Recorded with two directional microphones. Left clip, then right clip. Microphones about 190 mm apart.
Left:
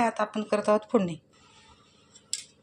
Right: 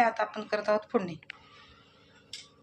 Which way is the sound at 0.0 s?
45° left (ahead or behind).